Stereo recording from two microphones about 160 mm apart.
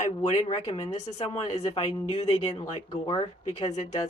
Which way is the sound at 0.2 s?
45° left (ahead or behind).